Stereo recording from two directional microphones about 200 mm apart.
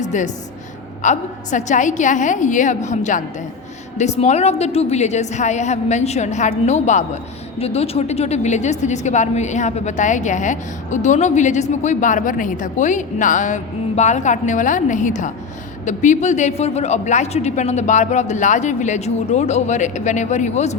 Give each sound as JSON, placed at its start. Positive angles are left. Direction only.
{"t": 0.0, "sound": "speech", "side_deg": 35}